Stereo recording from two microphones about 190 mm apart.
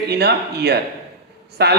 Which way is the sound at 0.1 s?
60° right (ahead or behind).